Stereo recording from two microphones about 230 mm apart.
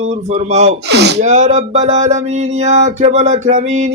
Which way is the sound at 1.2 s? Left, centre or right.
Right.